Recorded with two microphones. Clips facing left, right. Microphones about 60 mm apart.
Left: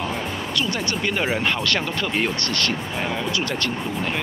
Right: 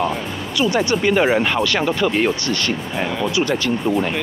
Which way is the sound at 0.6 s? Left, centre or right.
Centre.